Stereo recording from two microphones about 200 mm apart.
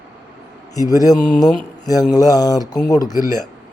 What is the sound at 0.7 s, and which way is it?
A man's voice, 20° left (ahead or behind).